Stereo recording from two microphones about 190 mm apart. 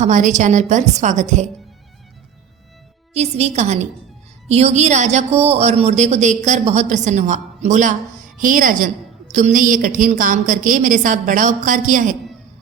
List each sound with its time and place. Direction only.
0.0 s speech: 40° right (ahead or behind)
3.1 s a woman's voice: 35° right (ahead or behind)